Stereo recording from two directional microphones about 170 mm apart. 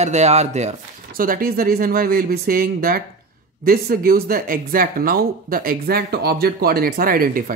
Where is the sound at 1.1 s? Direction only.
55° right (ahead or behind).